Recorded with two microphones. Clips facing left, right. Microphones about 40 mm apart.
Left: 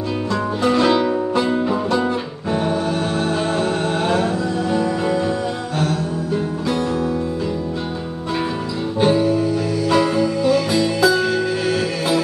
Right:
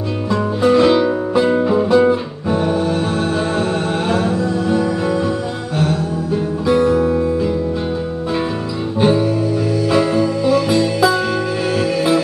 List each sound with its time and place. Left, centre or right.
0.6 s music: centre
4.1 s music: centre
9.0 s music: centre